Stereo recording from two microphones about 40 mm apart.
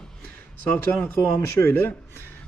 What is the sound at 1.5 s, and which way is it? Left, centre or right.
Speech, left.